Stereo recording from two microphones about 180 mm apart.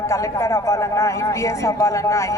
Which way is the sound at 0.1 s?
15° left (ahead or behind).